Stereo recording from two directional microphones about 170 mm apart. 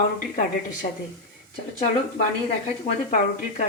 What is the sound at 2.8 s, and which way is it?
Speech, 45° left (ahead or behind).